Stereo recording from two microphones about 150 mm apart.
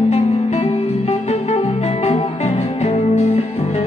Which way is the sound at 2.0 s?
45° left (ahead or behind).